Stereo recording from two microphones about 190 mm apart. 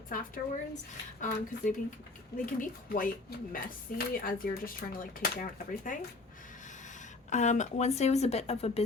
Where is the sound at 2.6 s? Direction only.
50° left (ahead or behind).